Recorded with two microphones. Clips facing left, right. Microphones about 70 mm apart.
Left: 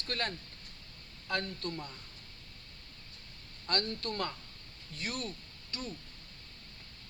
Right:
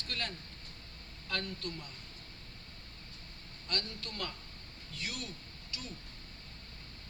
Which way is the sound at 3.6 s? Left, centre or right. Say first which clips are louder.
Left 6 dB; left.